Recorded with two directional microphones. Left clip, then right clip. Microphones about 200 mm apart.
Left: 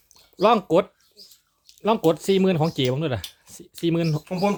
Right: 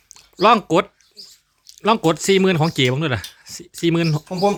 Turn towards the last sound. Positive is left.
turn(degrees=-15)  # may be behind; listen again after turning